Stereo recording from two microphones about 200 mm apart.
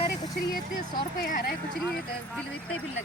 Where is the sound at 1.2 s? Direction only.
50° left (ahead or behind).